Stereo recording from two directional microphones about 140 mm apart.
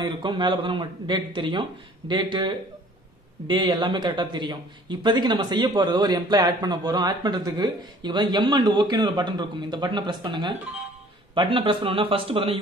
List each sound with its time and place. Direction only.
0.0 s a man's voice: 35° right (ahead or behind)